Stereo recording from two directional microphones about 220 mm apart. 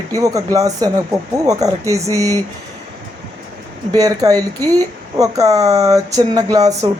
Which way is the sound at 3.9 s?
15° right (ahead or behind).